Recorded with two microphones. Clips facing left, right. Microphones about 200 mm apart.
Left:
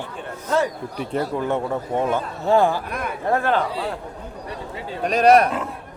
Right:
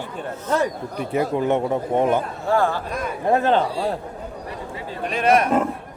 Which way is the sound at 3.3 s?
20° right (ahead or behind).